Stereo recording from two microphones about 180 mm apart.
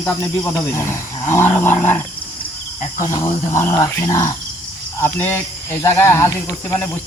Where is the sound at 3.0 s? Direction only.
20° left (ahead or behind).